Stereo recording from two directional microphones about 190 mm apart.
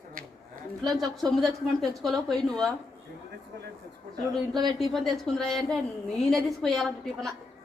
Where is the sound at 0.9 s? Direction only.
Centre (ahead or behind).